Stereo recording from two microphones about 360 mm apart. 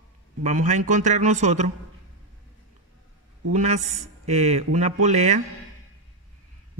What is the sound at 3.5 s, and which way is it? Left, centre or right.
Speech, centre.